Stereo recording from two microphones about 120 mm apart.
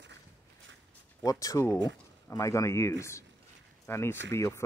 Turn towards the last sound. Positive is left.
turn(degrees=25)  # may be behind; listen again after turning